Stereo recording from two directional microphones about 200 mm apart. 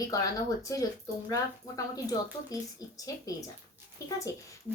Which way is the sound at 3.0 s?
15° left (ahead or behind).